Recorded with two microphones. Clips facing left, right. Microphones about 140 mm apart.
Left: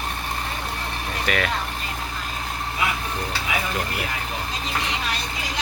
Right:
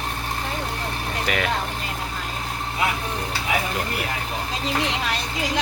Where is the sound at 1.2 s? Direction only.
20° right (ahead or behind).